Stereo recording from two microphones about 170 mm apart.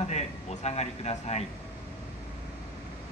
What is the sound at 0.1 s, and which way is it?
A man's voice, 40° left (ahead or behind).